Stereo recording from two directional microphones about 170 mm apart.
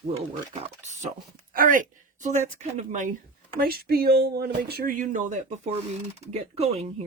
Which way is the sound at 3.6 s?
65° right (ahead or behind).